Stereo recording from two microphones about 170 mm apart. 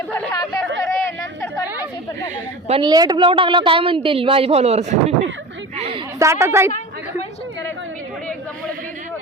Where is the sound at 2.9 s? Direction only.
25° right (ahead or behind); by 5.3 s 40° right (ahead or behind).